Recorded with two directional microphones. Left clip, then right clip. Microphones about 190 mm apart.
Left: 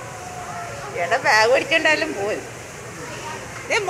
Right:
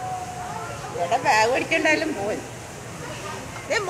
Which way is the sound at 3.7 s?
15° right (ahead or behind).